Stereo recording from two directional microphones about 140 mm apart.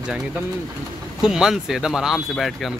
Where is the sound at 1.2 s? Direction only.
5° right (ahead or behind).